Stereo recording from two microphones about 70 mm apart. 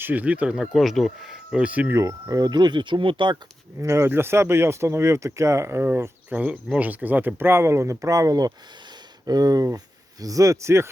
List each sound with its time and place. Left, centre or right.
0.0 s speech: right
0.5 s speech: centre
1.6 s speech: right
1.9 s speech: right
2.4 s speech: right
3.8 s speech: right
6.3 s speech: right